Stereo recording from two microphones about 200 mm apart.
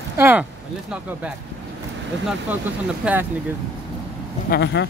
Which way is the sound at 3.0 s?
5° right (ahead or behind).